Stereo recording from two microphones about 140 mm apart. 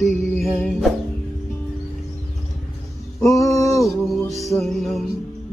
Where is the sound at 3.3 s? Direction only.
25° left (ahead or behind).